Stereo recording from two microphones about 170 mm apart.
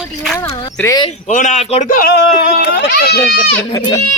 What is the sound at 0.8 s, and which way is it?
Speech, 20° left (ahead or behind).